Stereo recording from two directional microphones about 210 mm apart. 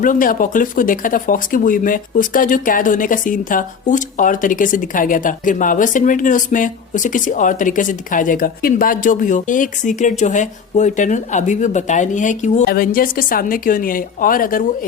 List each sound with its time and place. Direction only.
0.0 s speech: 40° left (ahead or behind)